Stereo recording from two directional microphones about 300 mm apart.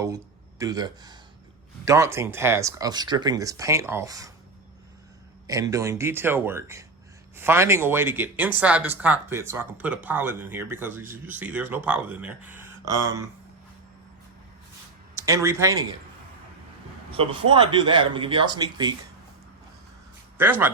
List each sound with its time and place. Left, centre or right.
0.0 s speech: centre
5.5 s speech: centre
15.1 s speech: centre
17.1 s speech: centre
20.4 s speech: centre